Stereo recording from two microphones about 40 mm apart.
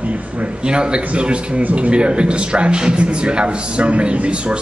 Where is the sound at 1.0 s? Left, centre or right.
Right.